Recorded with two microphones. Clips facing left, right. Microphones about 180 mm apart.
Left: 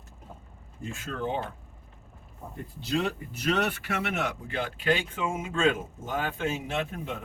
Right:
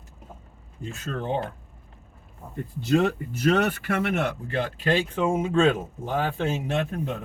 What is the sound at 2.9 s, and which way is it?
Speech, 50° right (ahead or behind).